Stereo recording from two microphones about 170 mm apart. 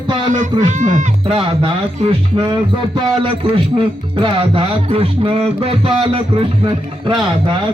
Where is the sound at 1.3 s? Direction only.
30° right (ahead or behind).